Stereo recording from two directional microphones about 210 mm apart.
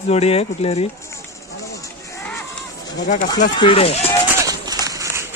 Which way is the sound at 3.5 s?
25° left (ahead or behind).